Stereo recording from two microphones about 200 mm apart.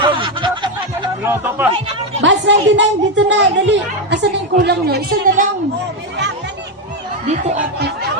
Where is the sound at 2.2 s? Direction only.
65° right (ahead or behind).